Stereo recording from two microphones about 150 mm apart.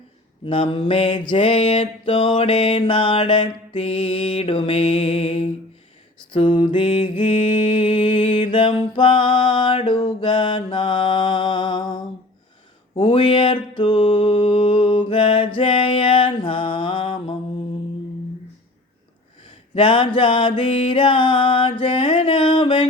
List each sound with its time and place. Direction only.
0.4 s mantra: 35° left (ahead or behind)
19.5 s a sound: 35° left (ahead or behind)
20.1 s mantra: 35° left (ahead or behind)